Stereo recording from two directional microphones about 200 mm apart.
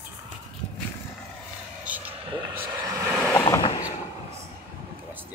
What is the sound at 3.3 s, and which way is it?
Vehicle, 20° left (ahead or behind).